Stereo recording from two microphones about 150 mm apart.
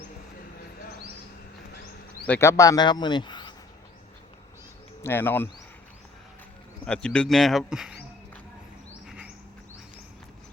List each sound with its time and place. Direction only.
2.2 s speech: 15° left (ahead or behind); by 3.5 s 30° left (ahead or behind)
5.0 s speech: 15° left (ahead or behind)
6.8 s speech: 5° left (ahead or behind)
9.0 s insect: 5° right (ahead or behind)